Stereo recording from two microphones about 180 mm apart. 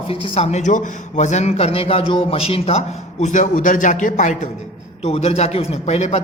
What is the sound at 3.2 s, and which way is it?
A man's voice, 45° left (ahead or behind).